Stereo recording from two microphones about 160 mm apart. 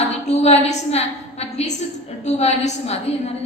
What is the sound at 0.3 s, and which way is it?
A woman's voice, 45° left (ahead or behind).